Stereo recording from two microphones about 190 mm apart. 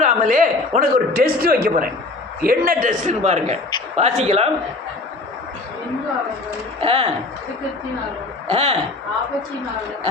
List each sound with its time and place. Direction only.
0.0 s a man's voice: 45° right (ahead or behind)
6.8 s a man's voice: 30° right (ahead or behind)
8.4 s a man's voice: 30° right (ahead or behind)